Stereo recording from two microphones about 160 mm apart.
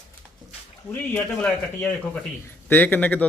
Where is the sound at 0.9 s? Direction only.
10° left (ahead or behind).